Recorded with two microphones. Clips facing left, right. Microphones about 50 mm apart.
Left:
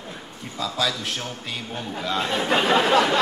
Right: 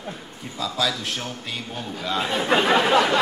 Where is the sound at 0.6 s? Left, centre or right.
Centre.